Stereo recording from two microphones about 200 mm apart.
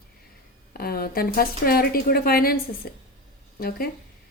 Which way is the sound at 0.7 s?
50° left (ahead or behind).